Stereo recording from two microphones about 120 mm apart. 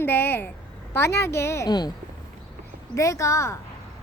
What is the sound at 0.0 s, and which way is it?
A woman's voice, 15° left (ahead or behind).